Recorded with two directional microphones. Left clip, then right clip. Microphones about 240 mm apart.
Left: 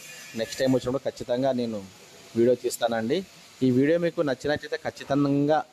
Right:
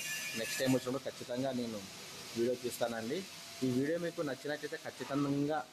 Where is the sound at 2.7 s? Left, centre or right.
Left.